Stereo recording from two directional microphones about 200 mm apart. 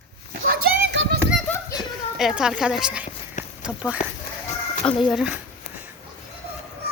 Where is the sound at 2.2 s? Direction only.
5° right (ahead or behind).